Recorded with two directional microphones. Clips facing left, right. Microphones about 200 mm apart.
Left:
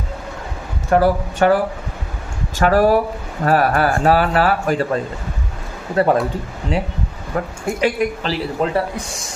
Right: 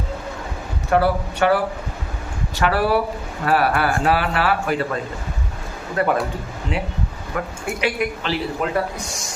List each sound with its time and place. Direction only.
0.9 s speech: 45° left (ahead or behind)
2.6 s speech: 45° left (ahead or behind)
6.0 s speech: 35° left (ahead or behind)
7.3 s speech: 40° left (ahead or behind)